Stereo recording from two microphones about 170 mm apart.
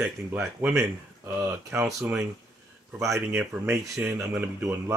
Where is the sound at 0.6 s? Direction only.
15° right (ahead or behind).